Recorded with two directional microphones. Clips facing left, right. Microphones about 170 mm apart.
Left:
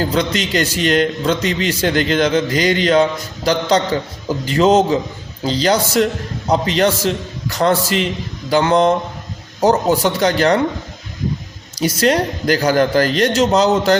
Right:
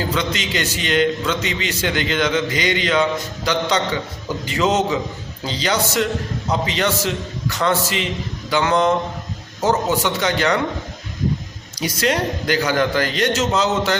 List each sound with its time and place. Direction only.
0.0 s a man's voice: 40° left (ahead or behind)
11.8 s a man's voice: 35° left (ahead or behind)